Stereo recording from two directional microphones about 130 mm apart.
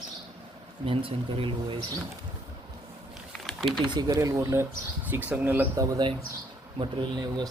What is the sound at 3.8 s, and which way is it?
Speech, 35° right (ahead or behind).